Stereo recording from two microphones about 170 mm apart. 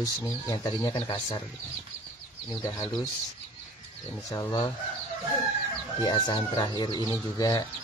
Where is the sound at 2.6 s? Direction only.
20° left (ahead or behind).